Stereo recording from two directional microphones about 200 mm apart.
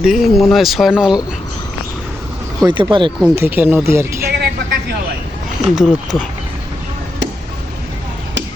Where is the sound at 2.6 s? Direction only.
25° right (ahead or behind).